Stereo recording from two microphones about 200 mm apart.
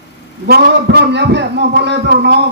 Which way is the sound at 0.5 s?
55° right (ahead or behind).